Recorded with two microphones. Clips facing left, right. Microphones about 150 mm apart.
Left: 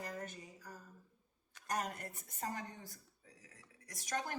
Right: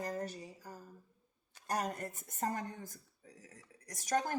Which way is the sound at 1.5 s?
30° right (ahead or behind).